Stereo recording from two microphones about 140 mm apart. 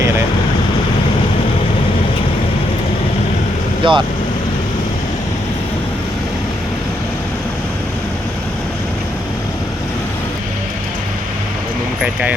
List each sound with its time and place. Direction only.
3.8 s speech: 35° right (ahead or behind)